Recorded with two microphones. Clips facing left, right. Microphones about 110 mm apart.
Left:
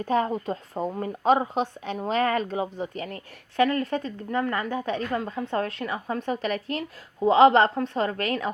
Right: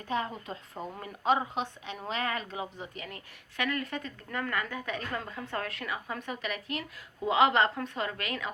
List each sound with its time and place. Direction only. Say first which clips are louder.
0.0 s a woman's voice: left 9 dB; 40° left (ahead or behind)